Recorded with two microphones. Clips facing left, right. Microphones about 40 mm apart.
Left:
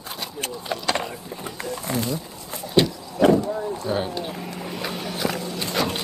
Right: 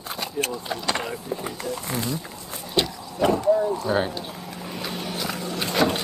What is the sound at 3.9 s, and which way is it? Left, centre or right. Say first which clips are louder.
Speech: right 1 dB; centre.